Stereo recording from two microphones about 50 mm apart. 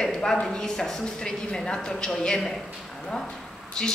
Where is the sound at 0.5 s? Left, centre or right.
Centre.